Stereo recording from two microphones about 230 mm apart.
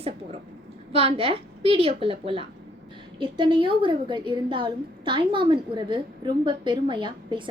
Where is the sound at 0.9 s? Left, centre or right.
Right.